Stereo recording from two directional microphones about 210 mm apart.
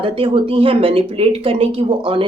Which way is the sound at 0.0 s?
25° right (ahead or behind).